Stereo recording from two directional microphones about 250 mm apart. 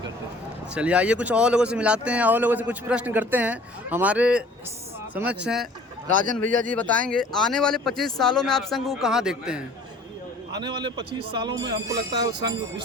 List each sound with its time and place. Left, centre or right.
0.7 s speech: centre
10.6 s speech: centre